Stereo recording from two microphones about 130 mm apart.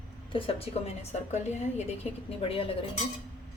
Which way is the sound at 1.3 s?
60° left (ahead or behind).